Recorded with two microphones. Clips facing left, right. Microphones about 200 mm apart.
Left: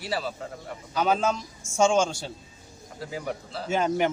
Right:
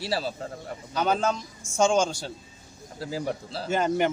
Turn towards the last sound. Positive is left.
turn(degrees=0)  # may be behind; listen again after turning